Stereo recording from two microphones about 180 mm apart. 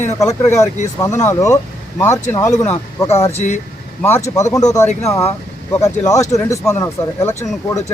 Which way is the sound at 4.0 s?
15° left (ahead or behind).